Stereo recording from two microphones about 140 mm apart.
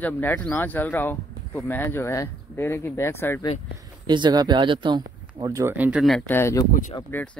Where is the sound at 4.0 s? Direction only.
30° right (ahead or behind).